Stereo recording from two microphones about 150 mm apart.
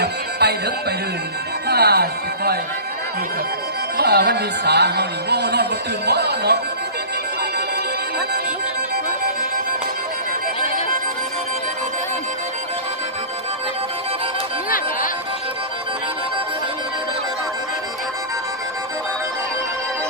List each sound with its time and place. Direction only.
0.0 s music: 90° right
1.6 s speech: 90° right
3.9 s speech: 90° right